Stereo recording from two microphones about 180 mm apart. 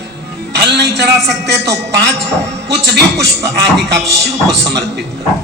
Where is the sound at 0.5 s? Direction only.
70° right (ahead or behind).